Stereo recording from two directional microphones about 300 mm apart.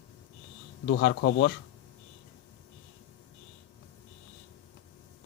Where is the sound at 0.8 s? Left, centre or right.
Left.